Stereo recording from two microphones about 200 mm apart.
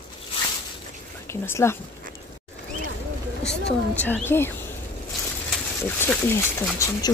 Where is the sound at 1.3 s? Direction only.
10° left (ahead or behind).